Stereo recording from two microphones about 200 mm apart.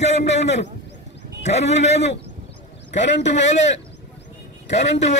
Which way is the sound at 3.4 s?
35° left (ahead or behind).